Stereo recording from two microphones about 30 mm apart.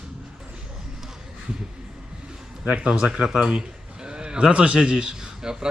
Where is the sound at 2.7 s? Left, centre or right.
Right.